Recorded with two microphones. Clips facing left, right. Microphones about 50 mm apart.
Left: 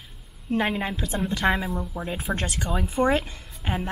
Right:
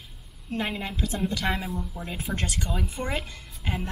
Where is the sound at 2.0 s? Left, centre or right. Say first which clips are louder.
Left 5 dB; centre.